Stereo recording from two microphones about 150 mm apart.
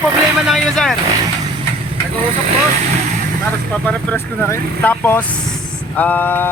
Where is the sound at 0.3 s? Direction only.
Centre (ahead or behind).